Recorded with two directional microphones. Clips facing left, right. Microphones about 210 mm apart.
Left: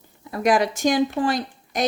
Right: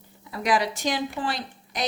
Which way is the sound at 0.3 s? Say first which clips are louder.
Left 5 dB; 50° left (ahead or behind).